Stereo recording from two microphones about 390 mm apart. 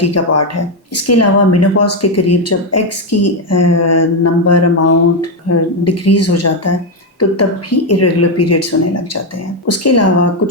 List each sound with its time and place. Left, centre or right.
0.0 s speech: left